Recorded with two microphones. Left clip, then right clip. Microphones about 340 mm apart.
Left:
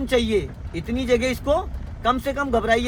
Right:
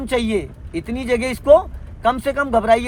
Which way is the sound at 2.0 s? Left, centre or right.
Centre.